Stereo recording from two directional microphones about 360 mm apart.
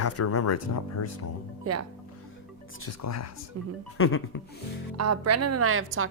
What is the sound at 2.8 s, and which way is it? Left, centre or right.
Speech, left.